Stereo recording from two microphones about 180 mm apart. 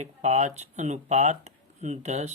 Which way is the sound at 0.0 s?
40° right (ahead or behind).